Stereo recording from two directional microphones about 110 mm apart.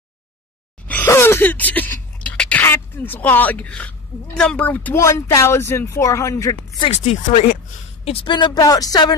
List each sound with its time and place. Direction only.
0.8 s a sound: 20° left (ahead or behind)
4.4 s speech: 10° left (ahead or behind)
4.9 s speech: 25° left (ahead or behind)
6.9 s speech: 85° left
8.0 s a woman's voice: 60° left (ahead or behind)
8.3 s speech: 40° left (ahead or behind)